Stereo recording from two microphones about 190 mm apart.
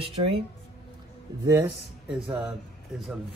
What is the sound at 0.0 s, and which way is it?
Speech, 30° right (ahead or behind).